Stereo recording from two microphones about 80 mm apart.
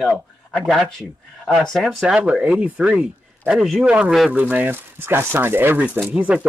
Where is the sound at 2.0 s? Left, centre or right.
Centre.